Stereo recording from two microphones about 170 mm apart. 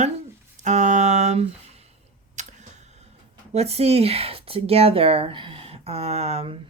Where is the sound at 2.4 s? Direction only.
45° right (ahead or behind).